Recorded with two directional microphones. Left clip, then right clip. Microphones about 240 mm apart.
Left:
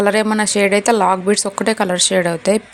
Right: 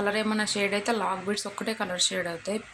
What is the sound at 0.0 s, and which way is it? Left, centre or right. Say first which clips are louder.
A woman's voice: left 12 dB; left.